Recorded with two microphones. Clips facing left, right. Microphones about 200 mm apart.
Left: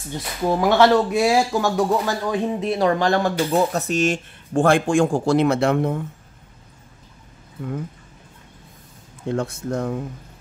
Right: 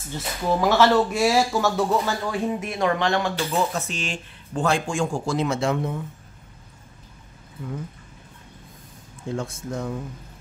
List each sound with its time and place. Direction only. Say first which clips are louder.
0.1 s speech: left 2 dB; 15° left (ahead or behind)
2.6 s speech: left 6 dB; 30° left (ahead or behind); by 5.9 s 60° left (ahead or behind)
9.3 s speech: left 5 dB; 65° left (ahead or behind)